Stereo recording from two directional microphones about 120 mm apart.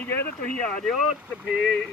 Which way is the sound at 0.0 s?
15° left (ahead or behind).